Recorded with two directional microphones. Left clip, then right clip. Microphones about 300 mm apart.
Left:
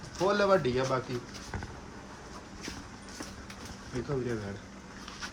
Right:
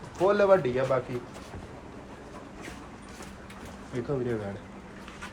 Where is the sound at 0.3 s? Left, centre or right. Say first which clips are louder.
Right 4 dB; centre.